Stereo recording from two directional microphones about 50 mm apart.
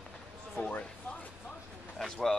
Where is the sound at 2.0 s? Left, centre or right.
Centre.